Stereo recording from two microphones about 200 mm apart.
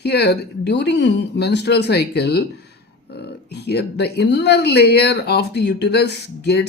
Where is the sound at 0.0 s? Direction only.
55° left (ahead or behind).